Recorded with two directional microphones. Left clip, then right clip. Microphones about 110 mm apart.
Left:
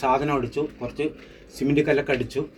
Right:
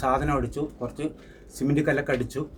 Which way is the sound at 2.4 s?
25° right (ahead or behind).